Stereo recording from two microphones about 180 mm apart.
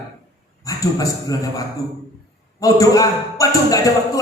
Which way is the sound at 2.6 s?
20° left (ahead or behind).